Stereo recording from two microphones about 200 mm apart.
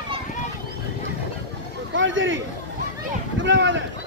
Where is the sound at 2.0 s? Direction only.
70° right (ahead or behind).